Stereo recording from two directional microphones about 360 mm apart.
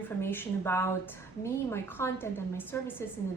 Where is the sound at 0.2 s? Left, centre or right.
Centre.